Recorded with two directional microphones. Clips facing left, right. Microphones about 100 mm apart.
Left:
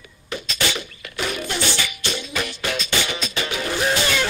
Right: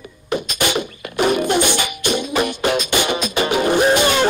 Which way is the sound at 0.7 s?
50° right (ahead or behind).